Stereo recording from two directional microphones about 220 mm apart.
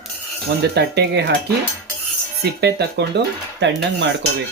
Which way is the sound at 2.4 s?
50° right (ahead or behind).